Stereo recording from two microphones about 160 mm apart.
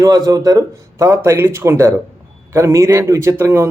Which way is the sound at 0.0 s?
20° right (ahead or behind).